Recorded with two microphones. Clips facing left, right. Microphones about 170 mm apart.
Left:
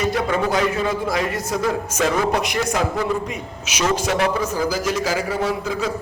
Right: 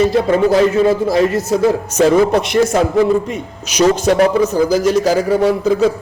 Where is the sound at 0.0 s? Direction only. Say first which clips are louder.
Right 8 dB; 30° right (ahead or behind).